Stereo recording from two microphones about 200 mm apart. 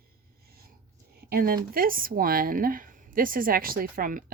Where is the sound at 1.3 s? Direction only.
45° right (ahead or behind).